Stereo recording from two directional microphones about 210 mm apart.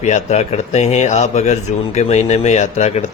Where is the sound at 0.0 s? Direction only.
35° left (ahead or behind).